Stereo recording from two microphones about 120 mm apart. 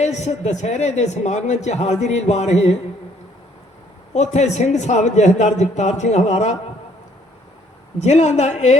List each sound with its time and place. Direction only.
0.0 s speech: 70° left (ahead or behind)
4.1 s speech: 70° left (ahead or behind)
7.9 s speech: 75° left (ahead or behind)